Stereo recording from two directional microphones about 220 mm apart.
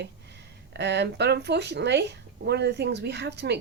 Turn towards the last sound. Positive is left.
turn(degrees=-50)  # may be behind; listen again after turning